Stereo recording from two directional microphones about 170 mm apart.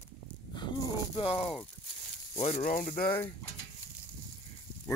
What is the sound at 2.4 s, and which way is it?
Speech, 45° left (ahead or behind).